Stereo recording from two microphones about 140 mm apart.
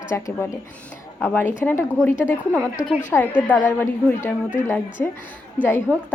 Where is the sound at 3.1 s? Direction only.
10° left (ahead or behind).